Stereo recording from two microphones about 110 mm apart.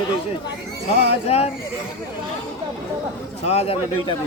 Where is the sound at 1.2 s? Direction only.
70° left (ahead or behind).